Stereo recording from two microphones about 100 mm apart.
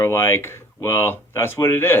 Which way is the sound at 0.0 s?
25° left (ahead or behind).